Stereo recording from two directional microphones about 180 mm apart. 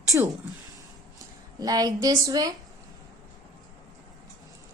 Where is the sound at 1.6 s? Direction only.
20° right (ahead or behind).